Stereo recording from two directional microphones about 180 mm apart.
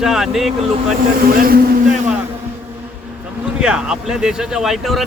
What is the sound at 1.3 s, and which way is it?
Speech, 55° right (ahead or behind).